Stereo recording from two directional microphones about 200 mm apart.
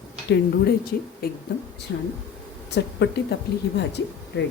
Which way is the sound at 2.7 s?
60° left (ahead or behind).